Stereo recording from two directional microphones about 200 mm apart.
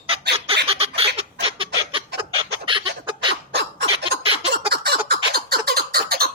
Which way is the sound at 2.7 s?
25° right (ahead or behind).